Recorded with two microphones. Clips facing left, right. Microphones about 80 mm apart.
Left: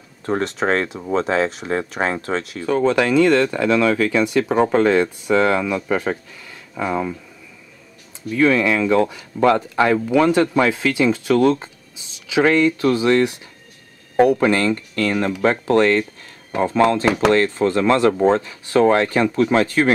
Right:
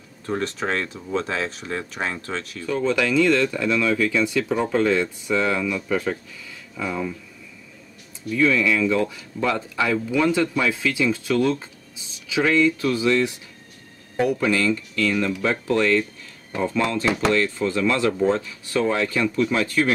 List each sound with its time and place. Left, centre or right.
0.4 s speech: left
2.6 s speech: left
8.3 s speech: left
14.1 s speech: left